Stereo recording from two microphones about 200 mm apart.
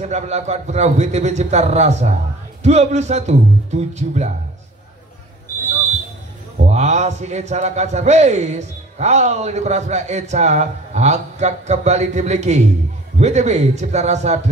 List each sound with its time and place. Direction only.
0.0 s a man's voice: 35° right (ahead or behind)
6.6 s a man's voice: 35° right (ahead or behind)